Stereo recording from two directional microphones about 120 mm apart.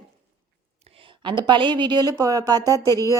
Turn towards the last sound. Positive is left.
turn(degrees=25)  # may be behind; listen again after turning